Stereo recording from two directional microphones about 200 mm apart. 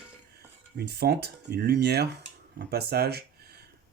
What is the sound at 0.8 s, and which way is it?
Speech, 55° right (ahead or behind).